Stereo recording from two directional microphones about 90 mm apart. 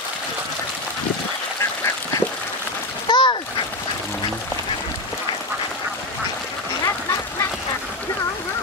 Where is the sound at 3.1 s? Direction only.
55° left (ahead or behind).